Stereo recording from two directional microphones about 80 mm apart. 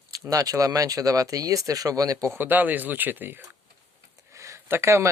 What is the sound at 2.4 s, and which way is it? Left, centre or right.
Speech, right.